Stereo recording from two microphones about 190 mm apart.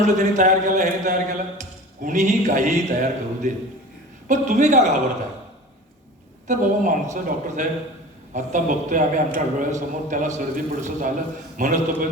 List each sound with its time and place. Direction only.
0.0 s a man's voice: 40° right (ahead or behind)
6.5 s a man's voice: 40° right (ahead or behind)